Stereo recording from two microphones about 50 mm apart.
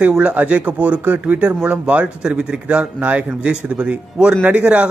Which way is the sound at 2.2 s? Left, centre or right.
Centre.